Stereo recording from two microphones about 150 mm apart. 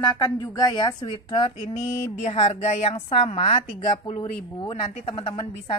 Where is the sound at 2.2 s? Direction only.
45° left (ahead or behind).